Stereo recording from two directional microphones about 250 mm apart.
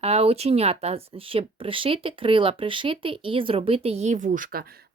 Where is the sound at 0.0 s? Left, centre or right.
Right.